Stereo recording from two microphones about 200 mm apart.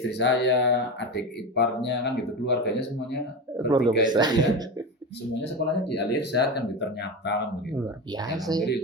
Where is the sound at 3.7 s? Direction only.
20° right (ahead or behind).